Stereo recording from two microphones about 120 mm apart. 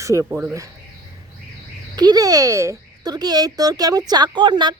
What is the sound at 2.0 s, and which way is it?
Speech, 30° right (ahead or behind).